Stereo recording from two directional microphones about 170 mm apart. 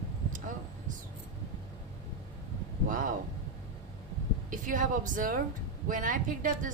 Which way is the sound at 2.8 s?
50° right (ahead or behind).